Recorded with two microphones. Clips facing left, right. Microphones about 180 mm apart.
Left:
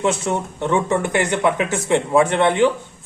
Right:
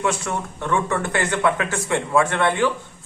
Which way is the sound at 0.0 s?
20° left (ahead or behind).